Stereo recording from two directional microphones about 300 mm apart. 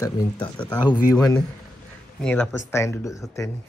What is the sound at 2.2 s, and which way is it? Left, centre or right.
Speech, centre.